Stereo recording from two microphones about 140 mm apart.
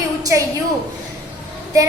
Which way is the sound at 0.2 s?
25° right (ahead or behind).